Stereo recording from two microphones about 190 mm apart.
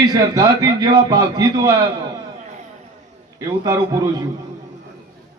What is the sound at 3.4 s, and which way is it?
Speech, 15° right (ahead or behind).